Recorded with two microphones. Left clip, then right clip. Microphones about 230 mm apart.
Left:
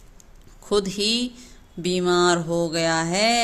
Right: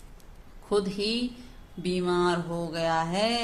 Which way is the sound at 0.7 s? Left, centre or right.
Left.